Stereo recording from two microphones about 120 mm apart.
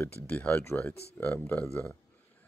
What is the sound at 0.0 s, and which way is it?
Speech, 15° left (ahead or behind).